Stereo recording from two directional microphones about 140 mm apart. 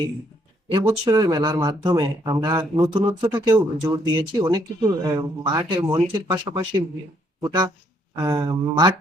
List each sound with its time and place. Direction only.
0.9 s speech: 25° right (ahead or behind)